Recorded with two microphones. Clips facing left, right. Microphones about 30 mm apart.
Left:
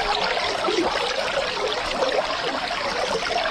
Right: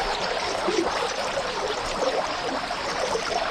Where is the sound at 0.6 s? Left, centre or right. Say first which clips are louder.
Left 2 dB; left.